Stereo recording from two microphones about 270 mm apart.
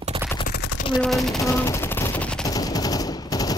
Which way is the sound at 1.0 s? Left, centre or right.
Centre.